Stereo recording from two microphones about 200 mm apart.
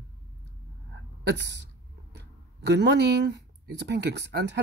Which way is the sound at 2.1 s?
60° right (ahead or behind).